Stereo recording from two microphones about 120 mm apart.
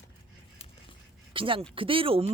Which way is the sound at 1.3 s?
45° right (ahead or behind).